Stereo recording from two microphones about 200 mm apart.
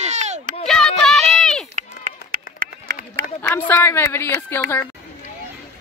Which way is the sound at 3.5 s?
10° left (ahead or behind).